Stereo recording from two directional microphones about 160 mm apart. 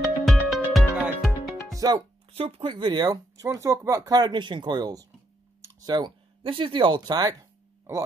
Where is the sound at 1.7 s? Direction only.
25° right (ahead or behind).